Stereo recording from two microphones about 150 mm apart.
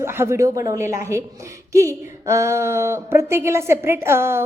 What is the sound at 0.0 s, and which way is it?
A woman's voice, 15° right (ahead or behind).